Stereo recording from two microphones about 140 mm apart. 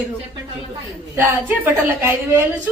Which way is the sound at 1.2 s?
15° right (ahead or behind).